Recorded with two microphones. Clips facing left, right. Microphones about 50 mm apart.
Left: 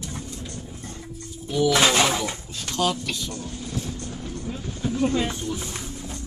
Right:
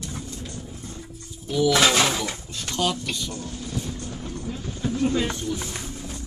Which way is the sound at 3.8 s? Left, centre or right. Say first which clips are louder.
Even; centre.